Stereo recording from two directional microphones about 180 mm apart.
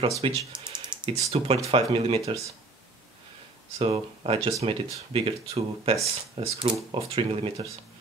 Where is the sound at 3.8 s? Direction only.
30° right (ahead or behind).